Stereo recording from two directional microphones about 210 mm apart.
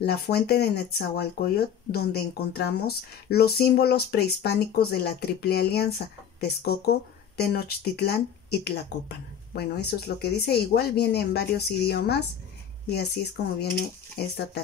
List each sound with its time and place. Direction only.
0.0 s speech: 50° left (ahead or behind)